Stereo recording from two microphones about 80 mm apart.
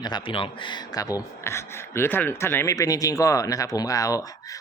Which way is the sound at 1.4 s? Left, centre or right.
Left.